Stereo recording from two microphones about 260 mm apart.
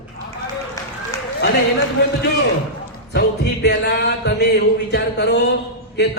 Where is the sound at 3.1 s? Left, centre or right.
Left.